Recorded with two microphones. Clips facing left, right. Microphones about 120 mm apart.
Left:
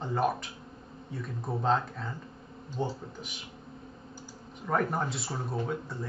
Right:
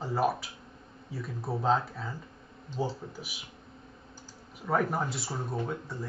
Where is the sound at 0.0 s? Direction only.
5° right (ahead or behind).